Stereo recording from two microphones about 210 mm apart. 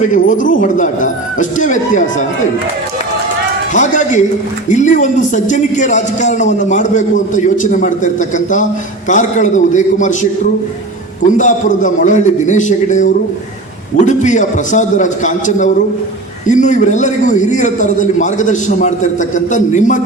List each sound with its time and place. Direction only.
0.0 s a man's voice: 35° left (ahead or behind)
3.8 s a man's voice: 35° left (ahead or behind)
11.2 s a man's voice: 35° left (ahead or behind)